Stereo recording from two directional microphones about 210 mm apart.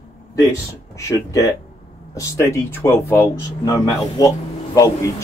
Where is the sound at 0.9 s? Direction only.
15° left (ahead or behind).